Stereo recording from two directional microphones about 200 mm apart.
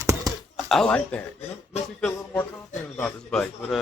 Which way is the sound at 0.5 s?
Centre (ahead or behind).